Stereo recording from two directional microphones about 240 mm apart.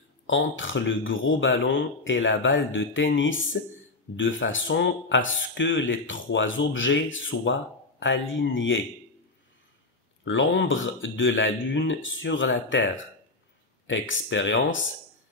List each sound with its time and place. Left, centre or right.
0.3 s speech: left
10.2 s speech: left